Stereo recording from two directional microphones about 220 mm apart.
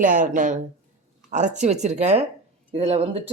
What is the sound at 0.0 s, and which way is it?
Speech, 35° right (ahead or behind).